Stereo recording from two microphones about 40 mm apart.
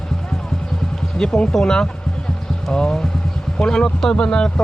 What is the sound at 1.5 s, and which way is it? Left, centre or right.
Speech, centre.